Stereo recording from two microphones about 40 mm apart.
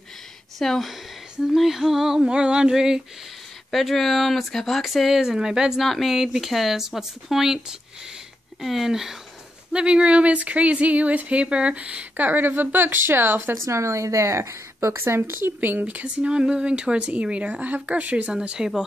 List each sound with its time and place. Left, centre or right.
0.6 s speech: centre
1.4 s speech: centre
2.2 s a woman's voice: right
3.7 s speech: centre
5.8 s speech: centre
6.1 s speech: centre
9.7 s a woman's voice: right
12.2 s speech: right
15.0 s speech: right
16.2 s a woman's voice: right
18.6 s speech: centre